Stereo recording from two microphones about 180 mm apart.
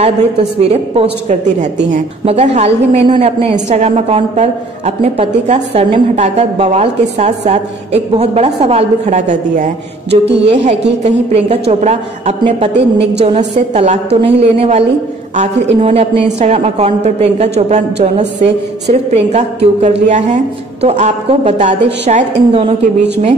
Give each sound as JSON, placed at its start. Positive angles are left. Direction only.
{"t": 0.0, "sound": "a woman's voice", "side_deg": -35}
{"t": 2.2, "sound": "a woman's voice", "side_deg": -35}
{"t": 12.7, "sound": "a woman's voice", "side_deg": -75}
{"t": 13.2, "sound": "a woman's voice", "side_deg": -35}